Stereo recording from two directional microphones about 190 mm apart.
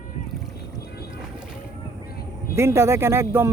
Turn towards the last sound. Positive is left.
turn(degrees=-15)  # may be behind; listen again after turning